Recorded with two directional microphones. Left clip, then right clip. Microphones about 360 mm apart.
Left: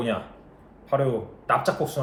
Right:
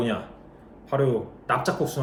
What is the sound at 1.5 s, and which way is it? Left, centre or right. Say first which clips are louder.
Speech: left 2 dB; centre.